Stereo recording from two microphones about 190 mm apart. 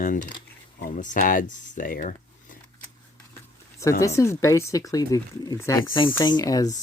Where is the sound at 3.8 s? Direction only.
15° left (ahead or behind).